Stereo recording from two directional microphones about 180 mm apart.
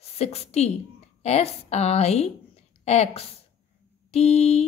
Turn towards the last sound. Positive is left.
turn(degrees=35)  # may be behind; listen again after turning